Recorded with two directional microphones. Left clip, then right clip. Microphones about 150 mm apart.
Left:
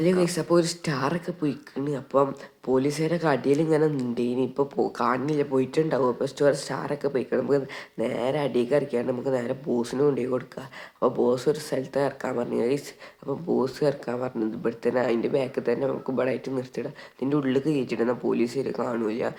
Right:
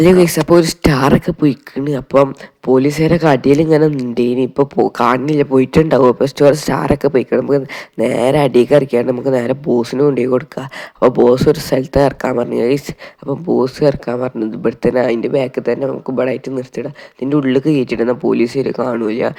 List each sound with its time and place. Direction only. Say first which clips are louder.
0.0 s a woman's voice: right 13 dB; 50° right (ahead or behind)